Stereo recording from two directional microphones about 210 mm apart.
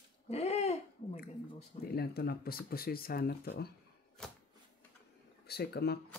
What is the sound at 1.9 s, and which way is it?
Speech, 50° left (ahead or behind).